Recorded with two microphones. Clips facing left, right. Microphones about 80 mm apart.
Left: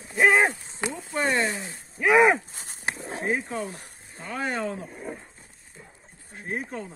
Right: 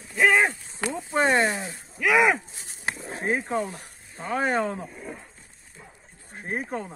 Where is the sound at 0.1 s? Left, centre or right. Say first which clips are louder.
Left 1 dB; left.